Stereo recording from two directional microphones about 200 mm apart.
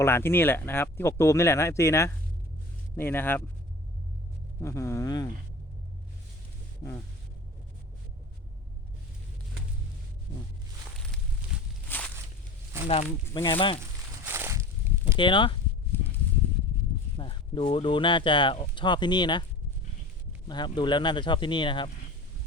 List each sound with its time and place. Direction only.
0.0 s speech: 10° left (ahead or behind)
4.6 s speech: 15° left (ahead or behind)
11.9 s walk: 10° left (ahead or behind)
13.3 s speech: 20° left (ahead or behind)
14.3 s walk: 10° right (ahead or behind)
15.1 s speech: 25° left (ahead or behind)
15.9 s horse: 10° left (ahead or behind)
17.2 s speech: 25° left (ahead or behind)
20.5 s speech: 20° left (ahead or behind)